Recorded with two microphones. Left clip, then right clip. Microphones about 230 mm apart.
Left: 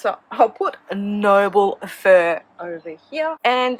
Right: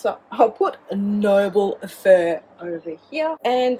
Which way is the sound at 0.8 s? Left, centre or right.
Centre.